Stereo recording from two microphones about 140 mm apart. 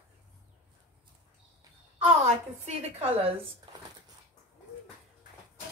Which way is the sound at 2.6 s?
50° right (ahead or behind).